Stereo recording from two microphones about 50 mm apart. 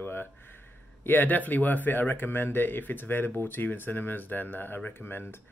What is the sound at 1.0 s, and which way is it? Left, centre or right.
Speech, left.